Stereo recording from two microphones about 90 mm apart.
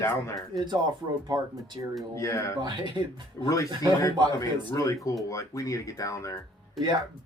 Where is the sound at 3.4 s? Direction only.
30° left (ahead or behind).